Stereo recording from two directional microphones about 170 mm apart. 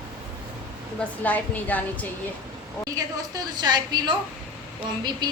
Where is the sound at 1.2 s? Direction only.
10° left (ahead or behind).